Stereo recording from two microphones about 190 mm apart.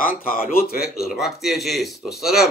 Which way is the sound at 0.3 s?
50° left (ahead or behind).